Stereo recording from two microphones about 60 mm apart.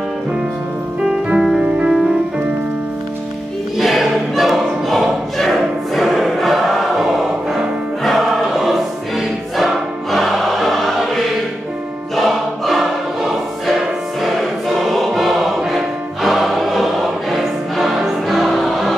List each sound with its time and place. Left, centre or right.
1.0 s music: centre
3.7 s choir: centre